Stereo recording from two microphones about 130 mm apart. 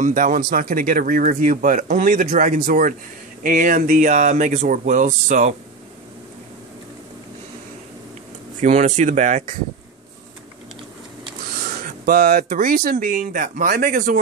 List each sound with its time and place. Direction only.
0.0 s speech: 90° right
8.5 s speech: 70° right (ahead or behind)
11.5 s speech: 90° right